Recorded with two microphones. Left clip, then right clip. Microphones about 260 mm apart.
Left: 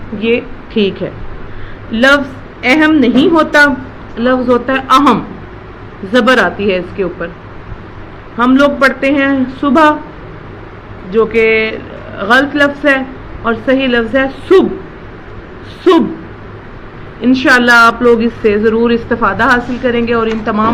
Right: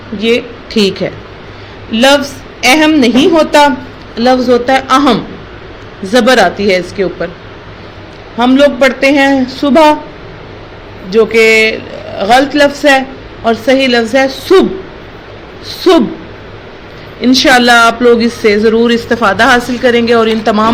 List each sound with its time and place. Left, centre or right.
0.2 s a woman's voice: right
8.4 s a woman's voice: right
11.1 s speech: right
15.8 s speech: right
17.2 s speech: right